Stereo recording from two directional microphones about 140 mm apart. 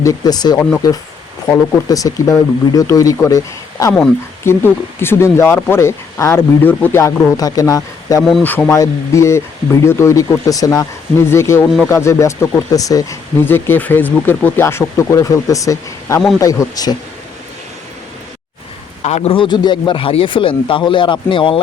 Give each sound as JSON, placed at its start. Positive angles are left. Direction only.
{"t": 0.0, "sound": "speech", "side_deg": 25}
{"t": 7.0, "sound": "speech", "side_deg": 25}
{"t": 8.4, "sound": "speech", "side_deg": 10}
{"t": 19.0, "sound": "speech", "side_deg": 50}